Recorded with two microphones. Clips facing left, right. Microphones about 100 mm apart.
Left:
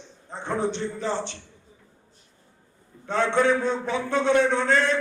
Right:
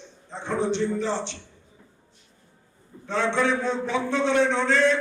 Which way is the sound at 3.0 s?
45° left (ahead or behind).